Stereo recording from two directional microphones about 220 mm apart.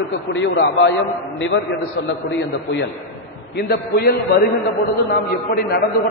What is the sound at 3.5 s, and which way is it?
A man's voice, 45° left (ahead or behind).